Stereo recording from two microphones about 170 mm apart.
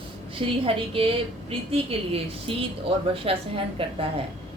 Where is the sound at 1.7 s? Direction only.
35° right (ahead or behind).